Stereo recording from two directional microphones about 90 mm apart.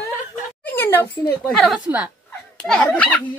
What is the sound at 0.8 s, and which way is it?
Speech, 25° left (ahead or behind).